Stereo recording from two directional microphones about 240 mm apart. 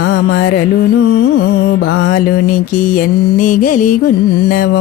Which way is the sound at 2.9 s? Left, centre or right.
Left.